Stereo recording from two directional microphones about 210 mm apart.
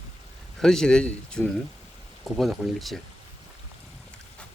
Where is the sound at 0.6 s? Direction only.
Centre (ahead or behind).